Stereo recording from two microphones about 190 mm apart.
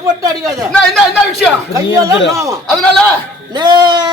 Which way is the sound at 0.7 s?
5° left (ahead or behind).